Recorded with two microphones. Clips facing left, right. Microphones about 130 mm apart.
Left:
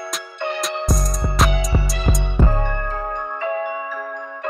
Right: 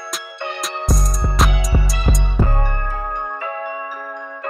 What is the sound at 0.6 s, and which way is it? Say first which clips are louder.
Music: right 1 dB; centre (ahead or behind).